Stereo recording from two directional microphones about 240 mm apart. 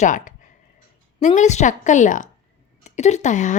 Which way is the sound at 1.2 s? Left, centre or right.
Left.